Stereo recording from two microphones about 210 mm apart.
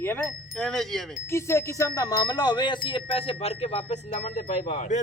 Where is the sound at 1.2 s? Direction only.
15° left (ahead or behind); by 5.0 s 35° left (ahead or behind).